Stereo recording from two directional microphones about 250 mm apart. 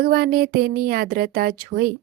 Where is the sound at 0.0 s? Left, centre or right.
Right.